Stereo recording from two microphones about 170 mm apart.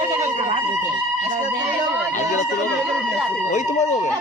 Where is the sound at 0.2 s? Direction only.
45° right (ahead or behind).